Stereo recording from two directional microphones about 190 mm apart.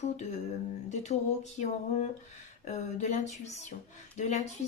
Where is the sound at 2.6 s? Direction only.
35° left (ahead or behind).